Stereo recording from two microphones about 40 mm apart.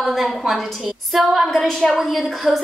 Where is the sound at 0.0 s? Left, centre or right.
Centre.